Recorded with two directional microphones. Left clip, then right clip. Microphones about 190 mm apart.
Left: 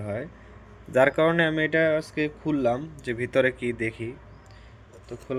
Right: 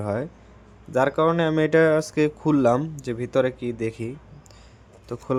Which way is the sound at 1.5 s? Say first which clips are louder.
Right 4 dB; 35° right (ahead or behind).